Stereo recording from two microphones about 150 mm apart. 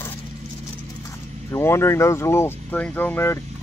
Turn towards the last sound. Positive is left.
turn(degrees=15)  # may be behind; listen again after turning